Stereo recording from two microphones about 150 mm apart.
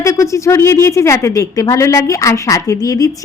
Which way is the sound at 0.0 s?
20° left (ahead or behind).